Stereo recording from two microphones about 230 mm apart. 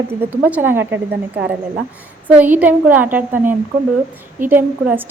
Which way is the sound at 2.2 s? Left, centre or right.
Centre.